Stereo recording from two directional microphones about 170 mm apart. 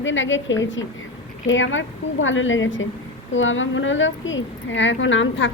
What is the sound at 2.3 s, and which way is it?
A woman's voice, 90° left.